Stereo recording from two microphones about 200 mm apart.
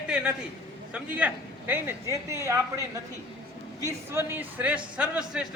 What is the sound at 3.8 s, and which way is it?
Speech, 10° right (ahead or behind).